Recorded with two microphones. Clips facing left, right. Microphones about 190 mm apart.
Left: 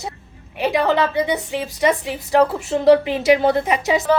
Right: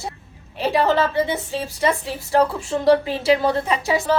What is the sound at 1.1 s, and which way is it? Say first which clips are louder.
A woman's voice: left 1 dB; 15° left (ahead or behind).